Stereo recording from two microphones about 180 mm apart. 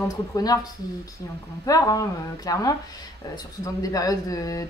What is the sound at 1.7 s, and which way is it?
Speech, 20° left (ahead or behind).